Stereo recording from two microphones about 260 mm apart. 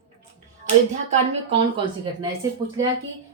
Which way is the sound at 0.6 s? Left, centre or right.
Right.